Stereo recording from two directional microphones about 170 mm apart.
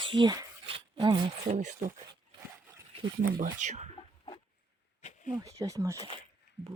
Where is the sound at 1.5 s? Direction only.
45° right (ahead or behind).